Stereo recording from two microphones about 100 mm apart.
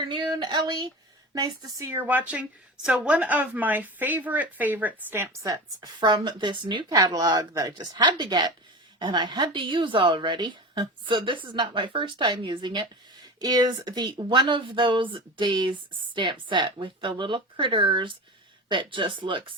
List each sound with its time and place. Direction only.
0.0 s a woman's voice: 50° right (ahead or behind)
1.9 s a woman's voice: 20° right (ahead or behind); by 12.9 s 50° right (ahead or behind)
13.4 s a woman's voice: 40° right (ahead or behind); by 19.5 s 55° right (ahead or behind)